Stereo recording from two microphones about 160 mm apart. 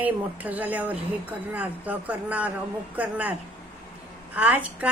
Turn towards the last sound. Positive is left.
turn(degrees=-10)  # may be behind; listen again after turning